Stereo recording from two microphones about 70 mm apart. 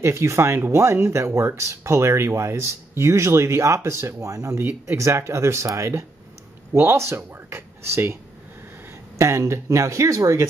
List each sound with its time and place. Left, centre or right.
0.0 s speech: right
9.2 s speech: right